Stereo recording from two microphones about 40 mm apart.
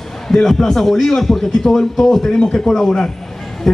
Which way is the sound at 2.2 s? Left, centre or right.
Left.